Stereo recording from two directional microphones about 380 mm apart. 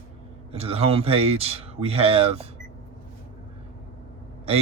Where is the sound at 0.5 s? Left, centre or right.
Centre.